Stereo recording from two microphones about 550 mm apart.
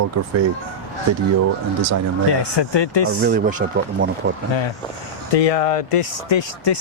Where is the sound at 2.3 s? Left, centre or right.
Left.